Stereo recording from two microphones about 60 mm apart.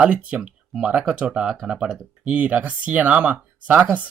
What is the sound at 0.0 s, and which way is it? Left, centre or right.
Speech, right.